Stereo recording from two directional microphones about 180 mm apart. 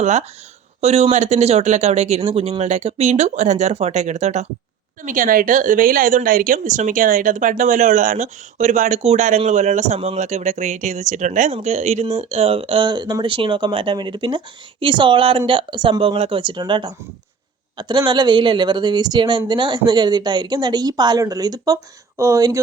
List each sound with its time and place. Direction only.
0.0 s speech: 40° right (ahead or behind)
5.0 s a woman's voice: 50° right (ahead or behind); by 22.6 s 20° right (ahead or behind)